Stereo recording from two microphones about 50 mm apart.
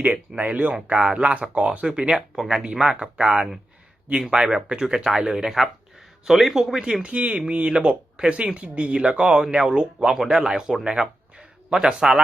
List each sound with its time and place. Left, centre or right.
0.0 s speech: right; by 7.0 s centre
7.0 s speech: right